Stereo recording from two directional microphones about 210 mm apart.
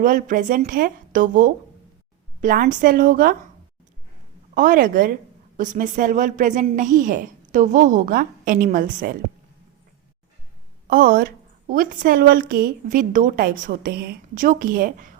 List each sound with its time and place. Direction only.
0.0 s a woman's voice: 40° right (ahead or behind)
4.5 s a woman's voice: 40° right (ahead or behind)
10.8 s a woman's voice: 45° right (ahead or behind)